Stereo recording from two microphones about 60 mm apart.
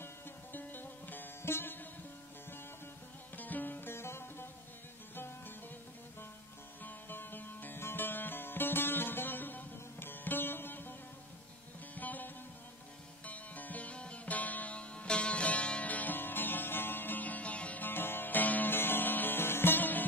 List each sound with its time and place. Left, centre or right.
0.0 s music: left
3.3 s music: left
6.8 s music: left